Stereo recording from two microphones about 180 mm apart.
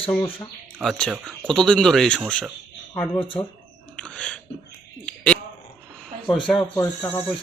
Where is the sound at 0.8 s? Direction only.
5° left (ahead or behind).